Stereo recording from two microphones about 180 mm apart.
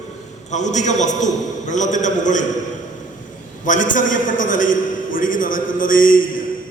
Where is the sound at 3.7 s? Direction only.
45° left (ahead or behind).